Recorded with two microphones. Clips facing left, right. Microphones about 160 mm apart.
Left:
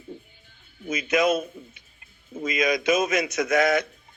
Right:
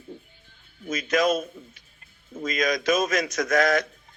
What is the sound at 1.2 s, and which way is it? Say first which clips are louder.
A man's voice: left 1 dB; 5° left (ahead or behind).